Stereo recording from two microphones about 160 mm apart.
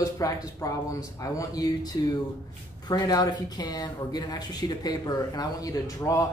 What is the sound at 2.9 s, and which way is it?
Speech, 25° left (ahead or behind).